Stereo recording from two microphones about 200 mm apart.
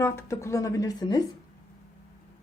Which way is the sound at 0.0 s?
15° left (ahead or behind).